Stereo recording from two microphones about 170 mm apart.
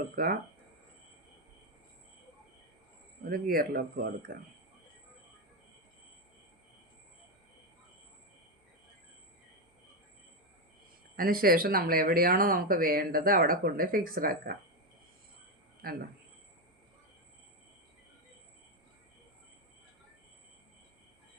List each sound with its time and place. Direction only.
0.2 s speech: 55° right (ahead or behind)
3.2 s speech: 60° right (ahead or behind)
11.2 s speech: 60° right (ahead or behind)
15.8 s speech: 60° right (ahead or behind)